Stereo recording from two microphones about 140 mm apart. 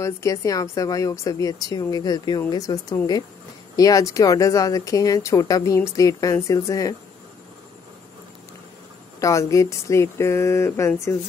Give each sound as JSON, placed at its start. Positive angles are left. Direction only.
{"t": 0.0, "sound": "speech", "side_deg": 20}
{"t": 9.2, "sound": "speech", "side_deg": 25}